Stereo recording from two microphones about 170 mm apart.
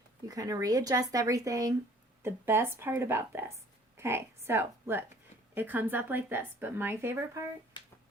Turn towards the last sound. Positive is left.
turn(degrees=-15)  # may be behind; listen again after turning